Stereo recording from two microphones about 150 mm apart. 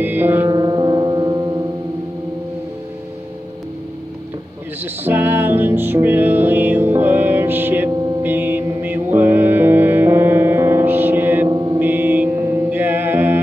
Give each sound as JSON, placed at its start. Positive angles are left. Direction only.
{"t": 0.0, "sound": "music", "side_deg": -15}
{"t": 0.5, "sound": "music", "side_deg": -30}
{"t": 5.0, "sound": "music", "side_deg": -10}
{"t": 11.4, "sound": "a sound", "side_deg": -30}
{"t": 11.8, "sound": "mantra", "side_deg": -15}